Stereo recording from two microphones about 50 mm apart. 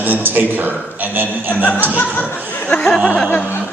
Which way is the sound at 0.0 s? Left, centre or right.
Right.